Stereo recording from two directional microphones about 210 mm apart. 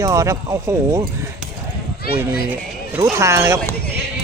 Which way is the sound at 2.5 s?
10° right (ahead or behind).